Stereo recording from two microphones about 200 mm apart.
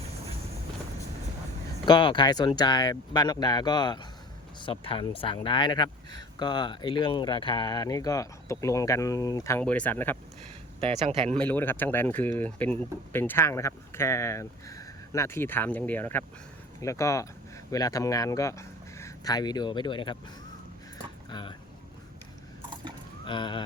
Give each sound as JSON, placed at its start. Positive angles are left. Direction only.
{"t": 1.9, "sound": "speech", "side_deg": 25}
{"t": 10.8, "sound": "speech", "side_deg": -30}
{"t": 11.3, "sound": "speech", "side_deg": 10}
{"t": 21.2, "sound": "a sound", "side_deg": 20}
{"t": 23.2, "sound": "speech", "side_deg": 25}